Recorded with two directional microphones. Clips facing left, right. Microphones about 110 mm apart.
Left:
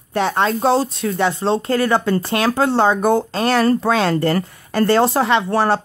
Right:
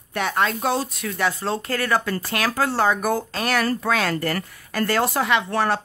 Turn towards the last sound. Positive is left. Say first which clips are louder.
# left 5 dB
turn(degrees=30)  # may be behind; listen again after turning